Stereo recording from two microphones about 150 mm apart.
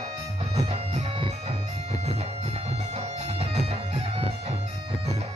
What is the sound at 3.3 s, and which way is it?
Music, 45° right (ahead or behind).